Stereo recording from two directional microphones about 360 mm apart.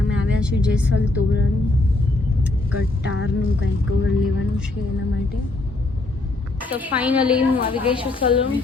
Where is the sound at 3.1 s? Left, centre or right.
Left.